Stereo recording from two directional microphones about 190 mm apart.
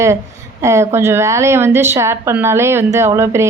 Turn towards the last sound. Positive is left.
turn(degrees=-15)  # may be behind; listen again after turning